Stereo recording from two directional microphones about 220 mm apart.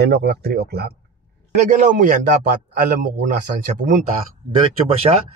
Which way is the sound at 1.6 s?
35° right (ahead or behind).